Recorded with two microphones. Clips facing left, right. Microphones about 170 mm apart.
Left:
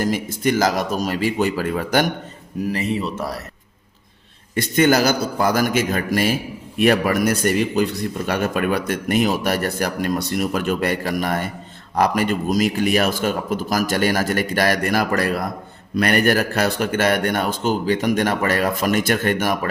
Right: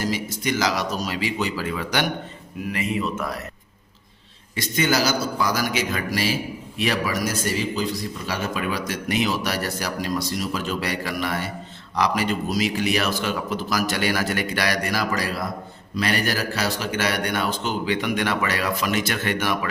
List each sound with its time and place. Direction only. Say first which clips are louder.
0.0 s a man's voice: left 5 dB; 50° left (ahead or behind)
2.7 s speech: even; 35° left (ahead or behind)
4.5 s a man's voice: left 6 dB; 55° left (ahead or behind)